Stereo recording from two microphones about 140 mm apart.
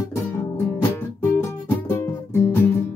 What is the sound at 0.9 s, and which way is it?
Music, 20° left (ahead or behind).